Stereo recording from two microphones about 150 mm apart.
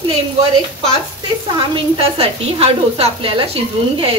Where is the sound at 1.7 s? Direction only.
35° right (ahead or behind).